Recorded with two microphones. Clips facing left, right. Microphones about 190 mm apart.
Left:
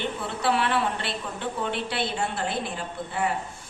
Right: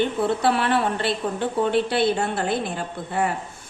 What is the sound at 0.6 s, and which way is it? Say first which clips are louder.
A woman's voice: right 4 dB; 45° right (ahead or behind).